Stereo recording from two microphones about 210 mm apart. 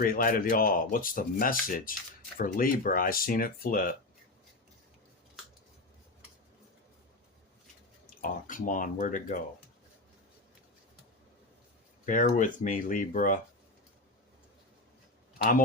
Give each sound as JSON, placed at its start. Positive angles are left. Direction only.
{"t": 0.0, "sound": "speech", "side_deg": 40}
{"t": 8.2, "sound": "speech", "side_deg": 40}
{"t": 12.0, "sound": "speech", "side_deg": 40}